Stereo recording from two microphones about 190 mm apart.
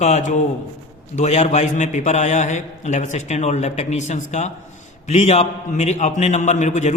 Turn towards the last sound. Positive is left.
turn(degrees=40)  # may be behind; listen again after turning